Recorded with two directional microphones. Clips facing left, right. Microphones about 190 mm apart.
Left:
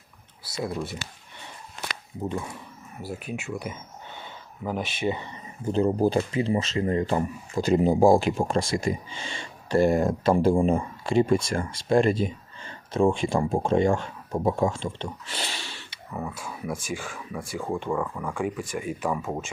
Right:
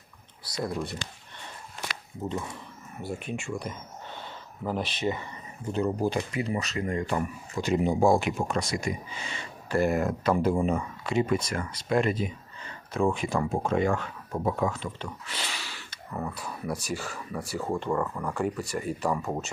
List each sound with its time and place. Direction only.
0.4 s speech: 5° left (ahead or behind)
3.0 s speech: 5° left (ahead or behind)
5.7 s speech: 30° left (ahead or behind)
15.4 s snort: 30° left (ahead or behind)
16.1 s speech: 5° left (ahead or behind)